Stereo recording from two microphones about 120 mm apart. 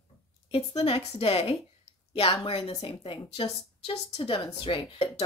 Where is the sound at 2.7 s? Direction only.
35° left (ahead or behind).